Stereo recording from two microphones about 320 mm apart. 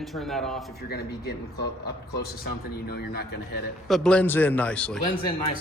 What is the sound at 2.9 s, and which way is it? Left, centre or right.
Speech, left.